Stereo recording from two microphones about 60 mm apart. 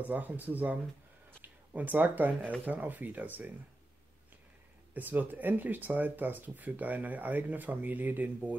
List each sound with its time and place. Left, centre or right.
0.0 s speech: right
4.9 s speech: right